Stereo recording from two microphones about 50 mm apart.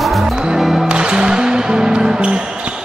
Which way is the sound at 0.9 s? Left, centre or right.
Centre.